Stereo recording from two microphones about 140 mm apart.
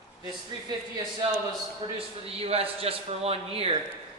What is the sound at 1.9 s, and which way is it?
A man's voice, 45° right (ahead or behind).